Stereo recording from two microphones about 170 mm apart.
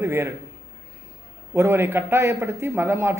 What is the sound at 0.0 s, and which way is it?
Speech, 15° right (ahead or behind).